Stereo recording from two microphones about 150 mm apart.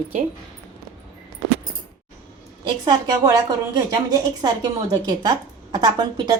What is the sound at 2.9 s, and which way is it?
A woman's voice, 25° right (ahead or behind).